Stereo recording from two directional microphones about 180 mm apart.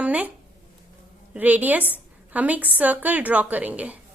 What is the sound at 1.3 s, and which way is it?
A woman's voice, 10° right (ahead or behind).